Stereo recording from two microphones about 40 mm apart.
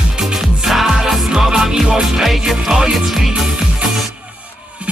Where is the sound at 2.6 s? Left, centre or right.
Centre.